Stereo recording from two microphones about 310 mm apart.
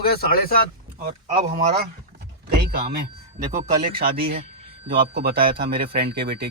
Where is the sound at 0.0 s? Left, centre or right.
Left.